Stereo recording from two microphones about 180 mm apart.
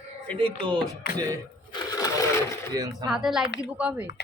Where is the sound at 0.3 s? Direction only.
25° right (ahead or behind).